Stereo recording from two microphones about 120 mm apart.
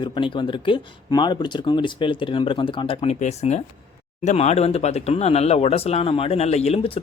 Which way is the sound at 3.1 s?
65° left (ahead or behind).